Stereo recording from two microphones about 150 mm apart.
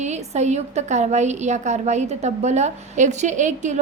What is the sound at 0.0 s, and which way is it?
A woman's voice, 50° right (ahead or behind).